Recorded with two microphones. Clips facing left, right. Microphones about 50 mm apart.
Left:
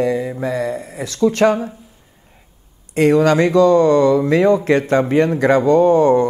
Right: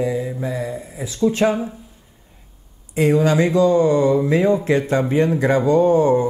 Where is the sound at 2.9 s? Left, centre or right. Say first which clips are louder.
Left 3 dB; left.